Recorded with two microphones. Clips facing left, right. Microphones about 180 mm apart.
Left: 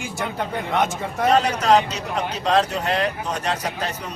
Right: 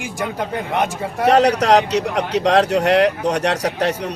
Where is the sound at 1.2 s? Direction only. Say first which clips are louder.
Right 5 dB; 75° right (ahead or behind).